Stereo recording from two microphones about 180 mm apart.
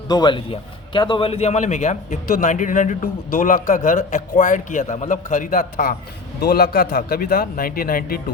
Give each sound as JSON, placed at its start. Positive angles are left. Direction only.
{"t": 0.1, "sound": "a man's voice", "side_deg": 25}